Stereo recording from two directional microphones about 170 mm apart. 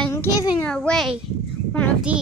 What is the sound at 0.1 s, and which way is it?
Speech, 20° left (ahead or behind).